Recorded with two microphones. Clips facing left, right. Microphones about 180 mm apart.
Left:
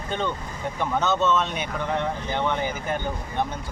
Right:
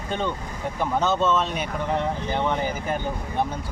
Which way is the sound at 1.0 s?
35° right (ahead or behind).